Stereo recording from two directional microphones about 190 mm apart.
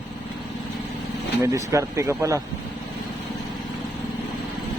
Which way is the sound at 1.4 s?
15° right (ahead or behind).